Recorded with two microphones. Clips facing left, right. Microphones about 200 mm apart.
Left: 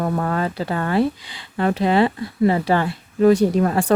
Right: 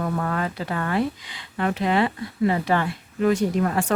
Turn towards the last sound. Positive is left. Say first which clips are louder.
# left 5 dB
turn(degrees=35)  # may be behind; listen again after turning